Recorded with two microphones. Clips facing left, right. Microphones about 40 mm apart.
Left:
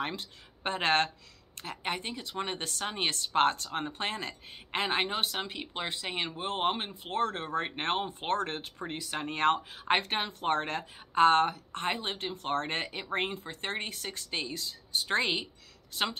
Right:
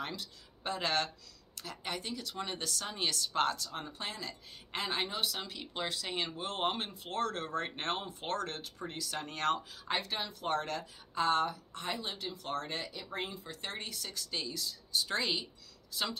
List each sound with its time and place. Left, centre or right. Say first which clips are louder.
0.0 s speech: left 5 dB; left